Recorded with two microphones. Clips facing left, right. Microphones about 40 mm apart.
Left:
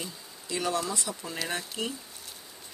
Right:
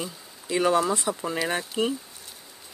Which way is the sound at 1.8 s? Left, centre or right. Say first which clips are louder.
Right 10 dB; centre.